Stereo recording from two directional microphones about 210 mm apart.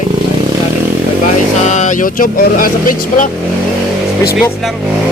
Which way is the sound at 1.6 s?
35° left (ahead or behind).